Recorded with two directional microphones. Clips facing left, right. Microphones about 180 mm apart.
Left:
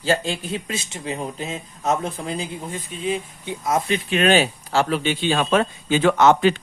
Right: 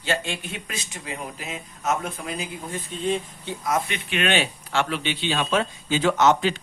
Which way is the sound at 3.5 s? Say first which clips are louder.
Left 4 dB; 25° left (ahead or behind).